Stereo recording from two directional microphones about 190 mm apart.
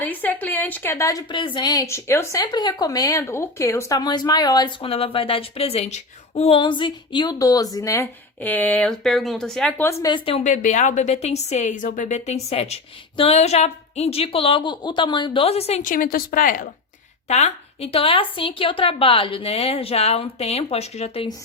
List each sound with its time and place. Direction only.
0.0 s a woman's voice: 10° left (ahead or behind); by 16.6 s 45° left (ahead or behind)
17.2 s a woman's voice: 35° left (ahead or behind)